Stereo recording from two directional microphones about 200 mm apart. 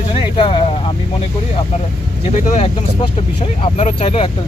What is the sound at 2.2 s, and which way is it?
Speech, 35° left (ahead or behind).